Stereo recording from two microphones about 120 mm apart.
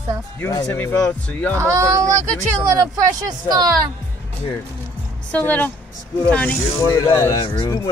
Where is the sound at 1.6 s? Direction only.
25° right (ahead or behind).